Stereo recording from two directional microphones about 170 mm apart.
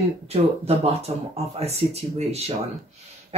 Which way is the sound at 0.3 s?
35° right (ahead or behind).